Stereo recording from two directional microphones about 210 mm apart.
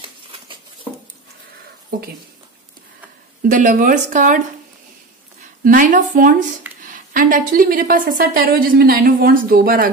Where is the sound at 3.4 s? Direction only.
35° right (ahead or behind).